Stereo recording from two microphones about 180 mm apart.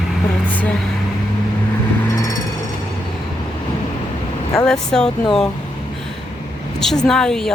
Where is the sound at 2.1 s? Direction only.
20° left (ahead or behind).